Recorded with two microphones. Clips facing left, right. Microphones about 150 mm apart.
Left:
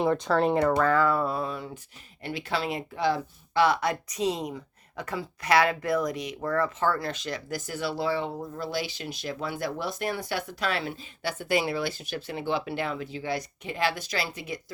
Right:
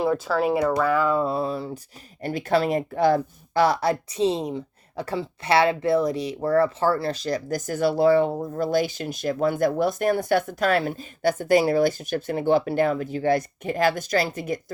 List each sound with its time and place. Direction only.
0.0 s speech: 5° right (ahead or behind)
0.8 s a sound: 10° right (ahead or behind); by 1.8 s 35° right (ahead or behind)
2.2 s speech: 45° right (ahead or behind)